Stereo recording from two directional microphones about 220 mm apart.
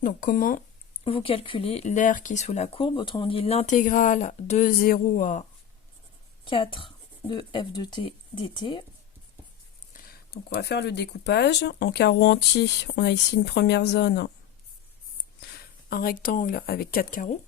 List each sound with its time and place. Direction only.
0.0 s speech: 40° left (ahead or behind)
1.0 s speech: 25° left (ahead or behind)
6.4 s speech: 25° left (ahead or behind)
9.9 s speech: 40° left (ahead or behind)
15.4 s speech: 45° left (ahead or behind)